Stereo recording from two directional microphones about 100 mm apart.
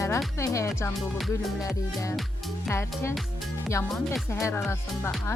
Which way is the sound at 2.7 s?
25° left (ahead or behind).